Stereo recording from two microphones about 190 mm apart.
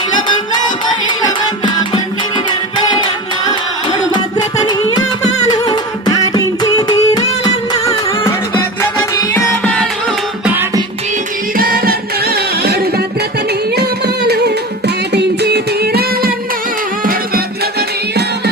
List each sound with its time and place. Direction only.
1.0 s music: 25° left (ahead or behind)
4.1 s music: 20° left (ahead or behind)
9.3 s music: 5° left (ahead or behind)
10.5 s music: 10° right (ahead or behind)
11.5 s music: 50° right (ahead or behind)
13.5 s singing: 60° right (ahead or behind)
17.0 s music: 50° right (ahead or behind)